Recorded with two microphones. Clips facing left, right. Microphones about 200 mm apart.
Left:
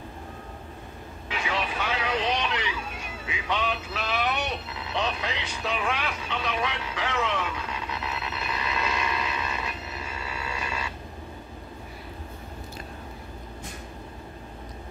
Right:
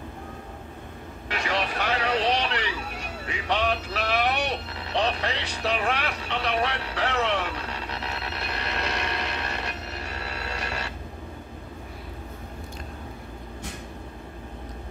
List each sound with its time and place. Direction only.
1.3 s vehicle: 70° right (ahead or behind)
3.0 s music: 70° right (ahead or behind)
7.2 s a sound: 65° right (ahead or behind)